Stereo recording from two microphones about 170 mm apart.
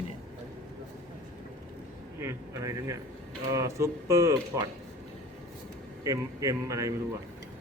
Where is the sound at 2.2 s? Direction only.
15° right (ahead or behind).